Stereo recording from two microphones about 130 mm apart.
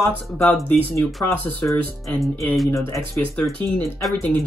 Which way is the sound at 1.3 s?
20° left (ahead or behind).